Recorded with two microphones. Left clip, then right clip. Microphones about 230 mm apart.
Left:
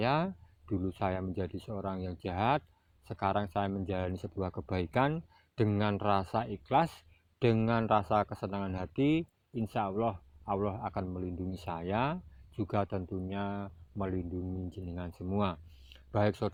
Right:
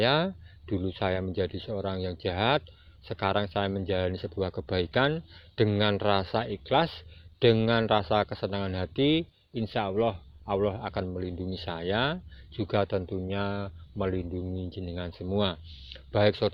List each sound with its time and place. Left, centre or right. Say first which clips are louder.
0.0 s speech: right 6 dB; left